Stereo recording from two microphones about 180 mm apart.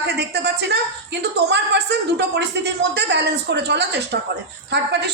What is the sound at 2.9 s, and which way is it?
A woman's voice, 70° right (ahead or behind).